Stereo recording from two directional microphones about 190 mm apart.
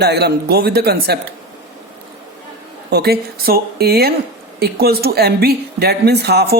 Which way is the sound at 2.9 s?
55° right (ahead or behind).